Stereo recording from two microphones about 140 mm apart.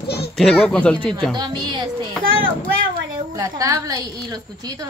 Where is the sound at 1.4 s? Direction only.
30° right (ahead or behind).